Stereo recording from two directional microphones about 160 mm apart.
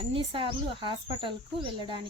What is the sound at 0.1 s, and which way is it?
Speech, 35° right (ahead or behind).